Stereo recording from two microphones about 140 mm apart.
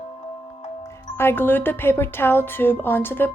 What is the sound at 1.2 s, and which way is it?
Speech, 15° left (ahead or behind).